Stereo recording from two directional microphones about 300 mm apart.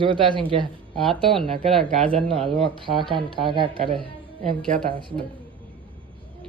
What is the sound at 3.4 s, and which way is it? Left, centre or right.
Speech, centre.